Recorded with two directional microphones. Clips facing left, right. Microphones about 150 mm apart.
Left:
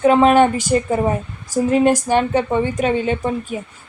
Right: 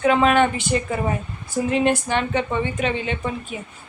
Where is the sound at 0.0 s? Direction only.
40° left (ahead or behind).